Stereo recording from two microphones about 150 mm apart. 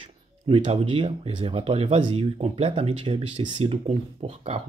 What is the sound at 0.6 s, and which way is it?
Speech, 40° right (ahead or behind).